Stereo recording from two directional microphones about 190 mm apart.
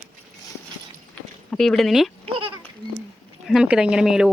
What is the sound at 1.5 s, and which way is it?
Speech, centre (ahead or behind).